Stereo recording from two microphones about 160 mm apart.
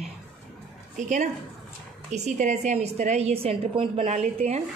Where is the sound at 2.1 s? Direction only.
50° right (ahead or behind).